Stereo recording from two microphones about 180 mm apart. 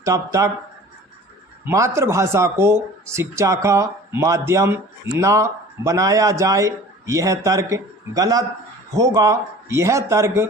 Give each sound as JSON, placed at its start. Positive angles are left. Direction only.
{"t": 0.0, "sound": "speech", "side_deg": -15}
{"t": 1.6, "sound": "speech", "side_deg": -15}